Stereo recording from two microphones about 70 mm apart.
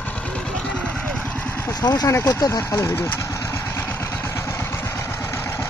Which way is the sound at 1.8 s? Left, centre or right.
Left.